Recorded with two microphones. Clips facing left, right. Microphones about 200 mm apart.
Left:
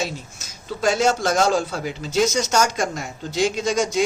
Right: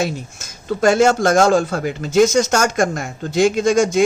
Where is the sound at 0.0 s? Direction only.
50° right (ahead or behind).